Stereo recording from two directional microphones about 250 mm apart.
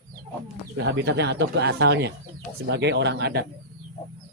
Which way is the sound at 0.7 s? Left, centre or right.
Right.